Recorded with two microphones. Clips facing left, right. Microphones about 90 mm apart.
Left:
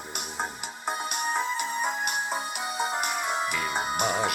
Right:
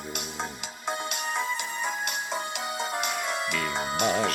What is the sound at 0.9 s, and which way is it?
Music, 15° left (ahead or behind).